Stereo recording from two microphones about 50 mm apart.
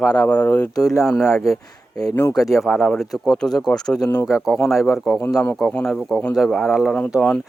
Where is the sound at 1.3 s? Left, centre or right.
Left.